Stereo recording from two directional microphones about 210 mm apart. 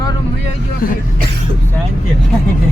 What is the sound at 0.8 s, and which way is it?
Speech, 45° left (ahead or behind).